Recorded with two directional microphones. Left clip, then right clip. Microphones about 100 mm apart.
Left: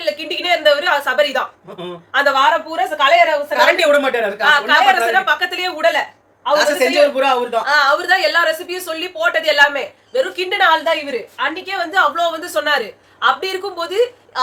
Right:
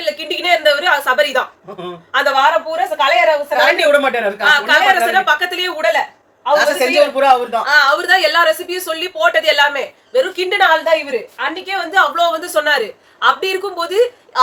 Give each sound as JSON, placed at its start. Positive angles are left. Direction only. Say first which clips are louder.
{"t": 0.0, "sound": "a sound", "louder": "right 1 dB", "side_deg": -15}
{"t": 2.1, "sound": "a woman's voice", "louder": "right 1 dB", "side_deg": -5}
{"t": 3.5, "sound": "a woman's voice", "louder": "right 1 dB", "side_deg": 45}
{"t": 4.4, "sound": "a woman's voice", "louder": "right 1 dB", "side_deg": -15}
{"t": 6.5, "sound": "a woman's voice", "louder": "right 1 dB", "side_deg": 40}
{"t": 7.6, "sound": "a woman's voice", "louder": "right 2 dB", "side_deg": -15}